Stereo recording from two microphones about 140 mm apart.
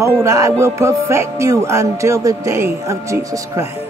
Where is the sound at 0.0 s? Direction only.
20° right (ahead or behind).